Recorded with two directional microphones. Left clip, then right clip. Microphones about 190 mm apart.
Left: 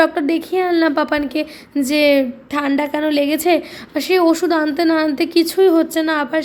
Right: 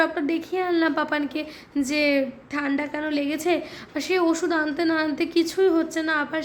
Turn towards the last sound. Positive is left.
turn(degrees=25)  # may be behind; listen again after turning